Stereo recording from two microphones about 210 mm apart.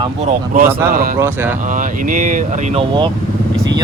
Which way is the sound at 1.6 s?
40° right (ahead or behind).